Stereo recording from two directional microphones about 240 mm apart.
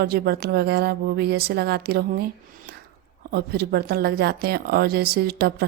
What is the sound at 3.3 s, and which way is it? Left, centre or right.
Speech, right.